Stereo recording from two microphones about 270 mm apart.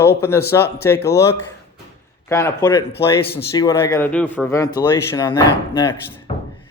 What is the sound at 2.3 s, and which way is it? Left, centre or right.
Speech, centre.